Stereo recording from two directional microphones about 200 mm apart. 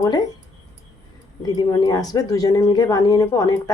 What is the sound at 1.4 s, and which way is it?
Speech, 20° left (ahead or behind).